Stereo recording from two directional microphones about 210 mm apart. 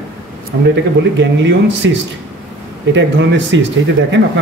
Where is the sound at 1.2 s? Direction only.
60° right (ahead or behind).